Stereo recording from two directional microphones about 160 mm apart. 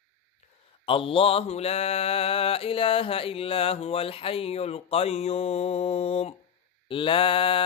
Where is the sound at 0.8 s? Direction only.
35° left (ahead or behind).